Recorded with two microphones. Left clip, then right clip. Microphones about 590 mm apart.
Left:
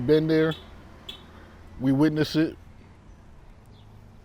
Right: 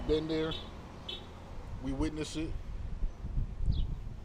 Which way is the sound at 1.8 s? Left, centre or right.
Left.